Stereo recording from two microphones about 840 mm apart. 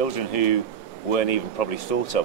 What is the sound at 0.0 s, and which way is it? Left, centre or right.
Speech, left.